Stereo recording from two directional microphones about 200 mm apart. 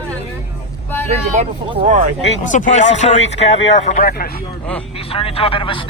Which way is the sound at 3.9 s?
45° left (ahead or behind).